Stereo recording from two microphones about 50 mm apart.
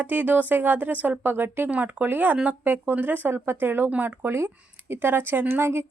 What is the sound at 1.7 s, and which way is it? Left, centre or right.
Speech, right.